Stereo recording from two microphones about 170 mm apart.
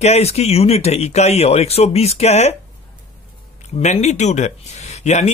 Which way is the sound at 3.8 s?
45° left (ahead or behind).